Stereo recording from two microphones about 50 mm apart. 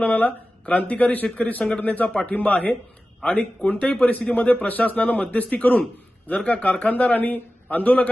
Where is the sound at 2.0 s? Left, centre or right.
Centre.